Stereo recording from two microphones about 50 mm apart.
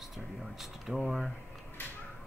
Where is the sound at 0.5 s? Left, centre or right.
Centre.